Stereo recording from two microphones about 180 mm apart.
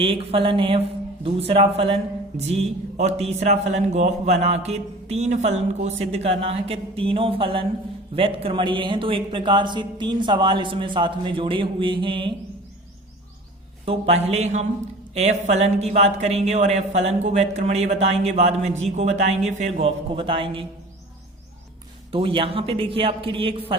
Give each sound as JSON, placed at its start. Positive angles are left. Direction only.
{"t": 0.0, "sound": "a man's voice", "side_deg": -30}
{"t": 13.8, "sound": "speech", "side_deg": -35}
{"t": 22.1, "sound": "speech", "side_deg": -30}